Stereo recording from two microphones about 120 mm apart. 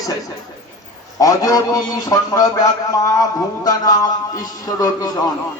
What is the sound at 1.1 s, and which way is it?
A man's voice, 30° left (ahead or behind).